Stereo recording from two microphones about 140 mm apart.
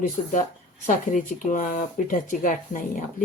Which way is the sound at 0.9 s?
75° left (ahead or behind).